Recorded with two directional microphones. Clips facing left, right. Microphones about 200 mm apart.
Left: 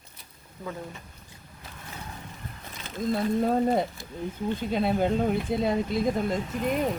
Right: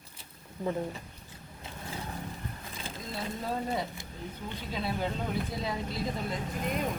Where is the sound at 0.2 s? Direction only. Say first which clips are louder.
Right 4 dB; 30° right (ahead or behind).